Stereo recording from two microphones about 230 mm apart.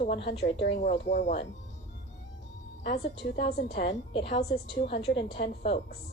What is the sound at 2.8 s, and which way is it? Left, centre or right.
A woman's voice, left.